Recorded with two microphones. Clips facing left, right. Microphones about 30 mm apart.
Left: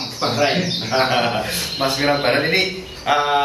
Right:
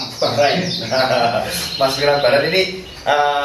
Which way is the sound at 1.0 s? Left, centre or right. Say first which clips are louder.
Right 5 dB; centre.